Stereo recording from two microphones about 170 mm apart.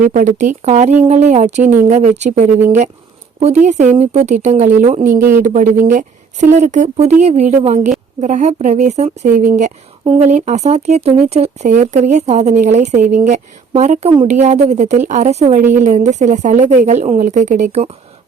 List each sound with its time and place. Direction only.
0.0 s a woman's voice: 50° right (ahead or behind)